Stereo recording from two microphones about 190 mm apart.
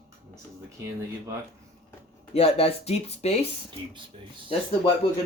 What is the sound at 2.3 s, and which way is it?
Speech, 30° left (ahead or behind).